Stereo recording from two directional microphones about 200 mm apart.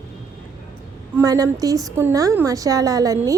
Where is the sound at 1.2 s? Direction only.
15° right (ahead or behind).